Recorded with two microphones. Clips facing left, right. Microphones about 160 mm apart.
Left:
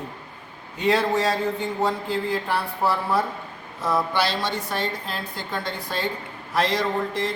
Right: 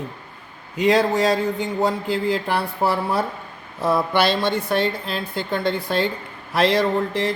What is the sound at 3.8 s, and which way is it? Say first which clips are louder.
A woman's voice: right 4 dB; 60° right (ahead or behind).